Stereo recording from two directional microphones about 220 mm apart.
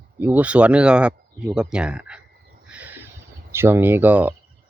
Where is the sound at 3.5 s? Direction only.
10° right (ahead or behind).